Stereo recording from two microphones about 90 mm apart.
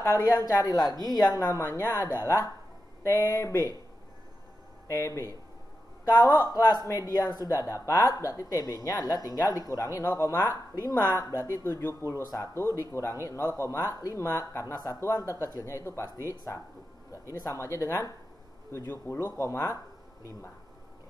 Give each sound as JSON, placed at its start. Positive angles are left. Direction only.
{"t": 0.0, "sound": "speech", "side_deg": 40}
{"t": 4.8, "sound": "speech", "side_deg": 30}
{"t": 6.0, "sound": "speech", "side_deg": 50}
{"t": 12.0, "sound": "speech", "side_deg": -35}
{"t": 12.5, "sound": "speech", "side_deg": 30}